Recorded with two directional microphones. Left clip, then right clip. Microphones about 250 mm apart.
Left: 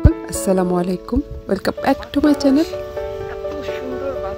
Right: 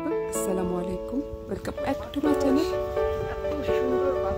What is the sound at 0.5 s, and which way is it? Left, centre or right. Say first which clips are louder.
Speech: left 10 dB; left.